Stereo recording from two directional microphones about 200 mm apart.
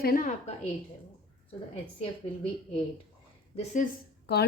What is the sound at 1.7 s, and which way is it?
Speech, 30° left (ahead or behind).